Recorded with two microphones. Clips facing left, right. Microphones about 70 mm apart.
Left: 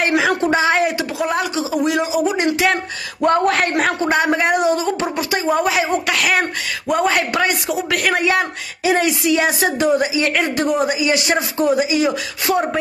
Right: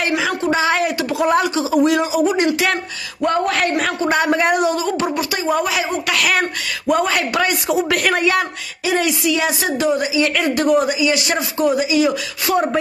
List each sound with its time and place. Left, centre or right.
0.0 s a sound: left
0.6 s a sound: left
1.2 s a man's voice: centre
3.3 s speech: left
4.1 s a woman's voice: centre
6.9 s a man's voice: centre
7.6 s speech: centre
8.1 s a man's voice: centre
8.8 s a woman's voice: left
10.9 s speech: left